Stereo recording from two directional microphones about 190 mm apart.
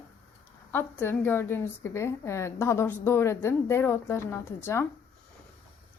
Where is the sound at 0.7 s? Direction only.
10° left (ahead or behind).